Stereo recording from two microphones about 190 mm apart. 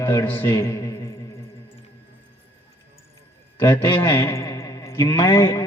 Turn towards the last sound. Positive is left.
turn(degrees=20)  # may be behind; listen again after turning